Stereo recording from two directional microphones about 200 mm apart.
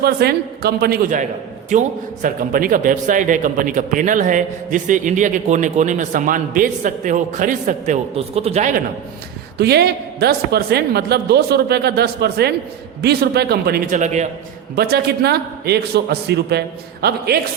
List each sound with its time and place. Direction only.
0.0 s a woman's voice: 55° right (ahead or behind); by 8.7 s 30° right (ahead or behind)
9.6 s a woman's voice: 55° right (ahead or behind)
14.0 s speech: 35° right (ahead or behind)
14.8 s a woman's voice: 50° right (ahead or behind)